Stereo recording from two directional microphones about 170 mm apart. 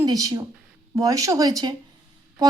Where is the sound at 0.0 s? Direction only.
20° right (ahead or behind).